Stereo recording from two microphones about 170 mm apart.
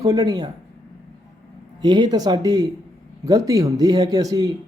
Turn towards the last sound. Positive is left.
turn(degrees=-20)  # may be behind; listen again after turning